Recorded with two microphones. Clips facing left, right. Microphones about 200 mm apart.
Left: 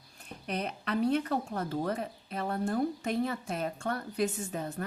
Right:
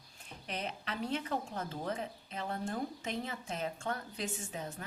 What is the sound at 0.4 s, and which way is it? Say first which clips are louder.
Speech: left 6 dB; 60° left (ahead or behind).